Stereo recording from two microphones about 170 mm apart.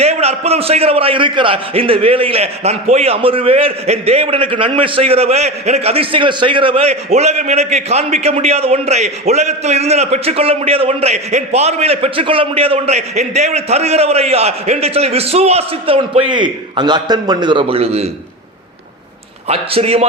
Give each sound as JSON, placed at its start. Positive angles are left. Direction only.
{"t": 0.0, "sound": "a man's voice", "side_deg": -40}
{"t": 19.5, "sound": "a man's voice", "side_deg": -35}